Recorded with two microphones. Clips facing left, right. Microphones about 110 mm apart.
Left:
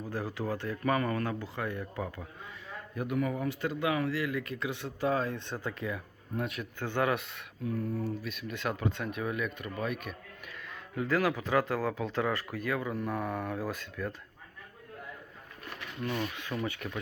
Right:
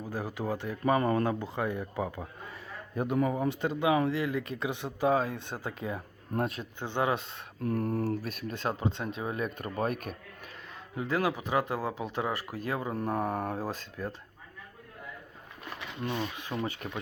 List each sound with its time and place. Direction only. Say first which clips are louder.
0.0 s speech: right 1 dB; 15° right (ahead or behind)
0.9 s speech: right 4 dB; 25° right (ahead or behind)
2.9 s speech: right 3 dB; 30° right (ahead or behind); by 5.7 s 10° right (ahead or behind)
6.4 s speech: right 1 dB; 30° right (ahead or behind)
7.6 s a sound: right 4 dB; 80° right
8.2 s speech: right 2 dB; 40° right (ahead or behind)
10.7 s speech: left 2 dB; 25° right (ahead or behind)
15.8 s speech: even; 25° right (ahead or behind)